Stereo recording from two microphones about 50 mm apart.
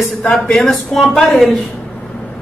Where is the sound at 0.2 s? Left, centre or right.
Left.